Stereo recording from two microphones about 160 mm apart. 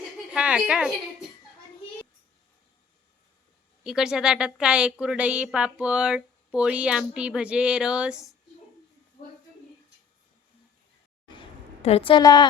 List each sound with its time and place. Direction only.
0.3 s a woman's voice: 5° right (ahead or behind)
3.8 s a woman's voice: 5° right (ahead or behind)
11.3 s a sound: 35° left (ahead or behind)